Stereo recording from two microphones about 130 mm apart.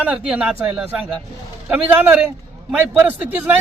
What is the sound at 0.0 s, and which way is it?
A man's voice, 10° right (ahead or behind).